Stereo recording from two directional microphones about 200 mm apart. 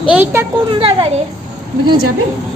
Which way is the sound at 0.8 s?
25° right (ahead or behind).